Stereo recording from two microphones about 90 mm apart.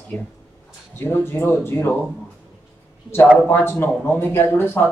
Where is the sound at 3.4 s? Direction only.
25° left (ahead or behind).